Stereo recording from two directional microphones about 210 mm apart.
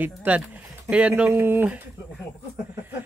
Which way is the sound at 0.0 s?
10° right (ahead or behind).